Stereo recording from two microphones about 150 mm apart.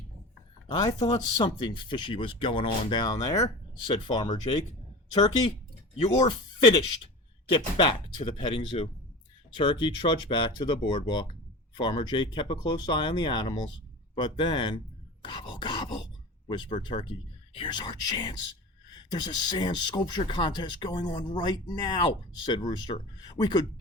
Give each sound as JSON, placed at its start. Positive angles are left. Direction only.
{"t": 0.7, "sound": "speech", "side_deg": 30}
{"t": 7.5, "sound": "speech", "side_deg": 35}
{"t": 15.2, "sound": "wail", "side_deg": 30}
{"t": 16.5, "sound": "speech", "side_deg": 30}